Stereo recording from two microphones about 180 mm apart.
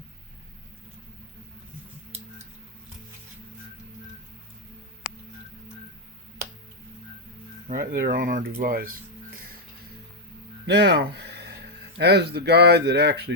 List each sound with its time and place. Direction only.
7.7 s speech: 55° right (ahead or behind)
8.6 s music: 55° right (ahead or behind)
10.7 s speech: 70° right (ahead or behind)